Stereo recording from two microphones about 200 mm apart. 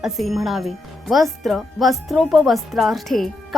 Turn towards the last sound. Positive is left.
turn(degrees=0)  # may be behind; listen again after turning